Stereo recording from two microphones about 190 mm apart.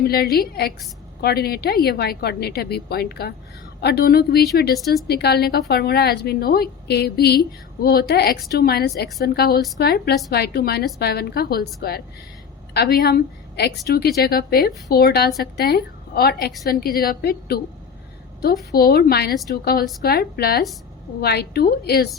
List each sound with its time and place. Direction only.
0.0 s a woman's voice: 55° left (ahead or behind)
18.7 s a woman's voice: 55° left (ahead or behind)